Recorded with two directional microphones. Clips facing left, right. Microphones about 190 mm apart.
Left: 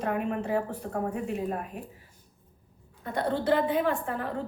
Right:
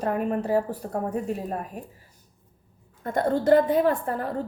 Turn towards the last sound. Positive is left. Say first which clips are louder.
# right 5 dB
turn(degrees=-40)  # may be behind; listen again after turning